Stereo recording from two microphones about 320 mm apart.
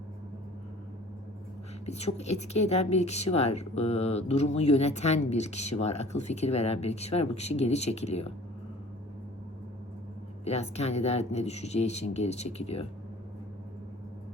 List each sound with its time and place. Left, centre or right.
1.9 s a woman's voice: centre
10.4 s a woman's voice: centre